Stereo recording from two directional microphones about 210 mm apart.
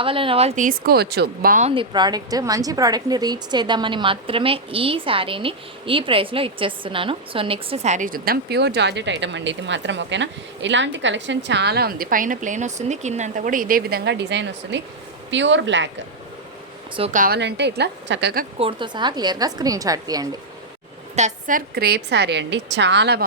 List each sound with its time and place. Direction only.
0.0 s a woman's voice: 25° right (ahead or behind)
1.7 s a woman's voice: 25° right (ahead or behind); by 15.9 s 60° right (ahead or behind)
16.9 s a woman's voice: 30° right (ahead or behind); by 18.4 s 50° right (ahead or behind)
18.6 s a woman's voice: 20° right (ahead or behind)
21.2 s a woman's voice: 35° right (ahead or behind); by 23.2 s 55° right (ahead or behind)